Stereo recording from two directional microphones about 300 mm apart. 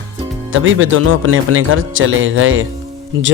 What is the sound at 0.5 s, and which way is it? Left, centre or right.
A man's voice, right.